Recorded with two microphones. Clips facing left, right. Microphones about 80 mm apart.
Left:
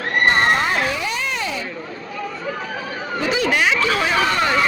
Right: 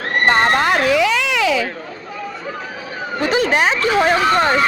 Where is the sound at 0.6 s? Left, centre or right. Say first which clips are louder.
Right 6 dB; right.